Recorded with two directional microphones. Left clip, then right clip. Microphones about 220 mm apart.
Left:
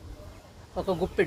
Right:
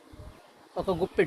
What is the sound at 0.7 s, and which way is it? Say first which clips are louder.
Speech: even; 35° right (ahead or behind).